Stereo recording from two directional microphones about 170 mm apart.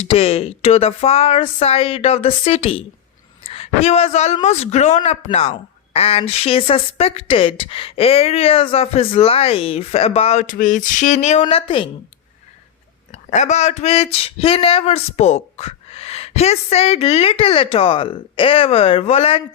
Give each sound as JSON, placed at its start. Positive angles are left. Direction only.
{"t": 0.1, "sound": "a woman's voice", "side_deg": 35}
{"t": 13.1, "sound": "speech", "side_deg": 45}